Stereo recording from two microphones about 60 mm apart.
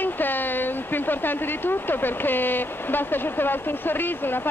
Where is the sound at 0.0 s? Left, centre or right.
Left.